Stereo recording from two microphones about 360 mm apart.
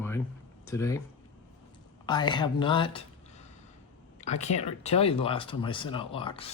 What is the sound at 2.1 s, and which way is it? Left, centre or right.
Speech, centre.